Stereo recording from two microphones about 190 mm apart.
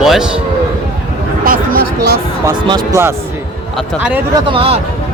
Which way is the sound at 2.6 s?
20° right (ahead or behind).